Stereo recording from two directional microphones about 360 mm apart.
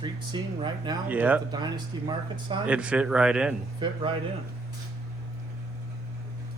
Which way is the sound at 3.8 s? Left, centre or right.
Centre.